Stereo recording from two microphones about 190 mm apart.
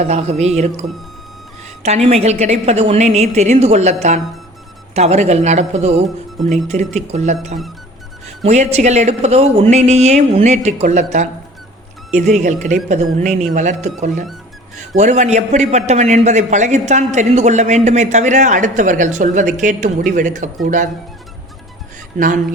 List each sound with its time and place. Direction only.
0.0 s a man's voice: 35° right (ahead or behind)
8.4 s a man's voice: 35° right (ahead or behind)